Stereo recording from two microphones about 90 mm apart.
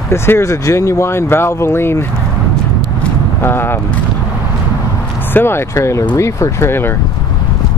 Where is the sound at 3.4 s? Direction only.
25° left (ahead or behind).